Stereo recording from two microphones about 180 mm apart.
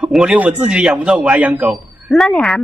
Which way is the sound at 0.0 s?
5° right (ahead or behind).